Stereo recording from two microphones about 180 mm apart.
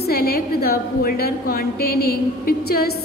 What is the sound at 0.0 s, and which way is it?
A woman's voice, 60° left (ahead or behind).